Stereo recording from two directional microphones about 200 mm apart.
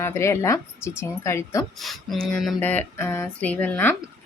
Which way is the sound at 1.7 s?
Centre (ahead or behind).